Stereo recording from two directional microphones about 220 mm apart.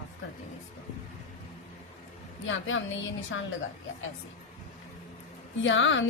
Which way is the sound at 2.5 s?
65° left (ahead or behind).